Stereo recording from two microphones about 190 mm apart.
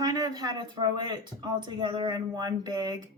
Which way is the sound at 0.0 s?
20° right (ahead or behind).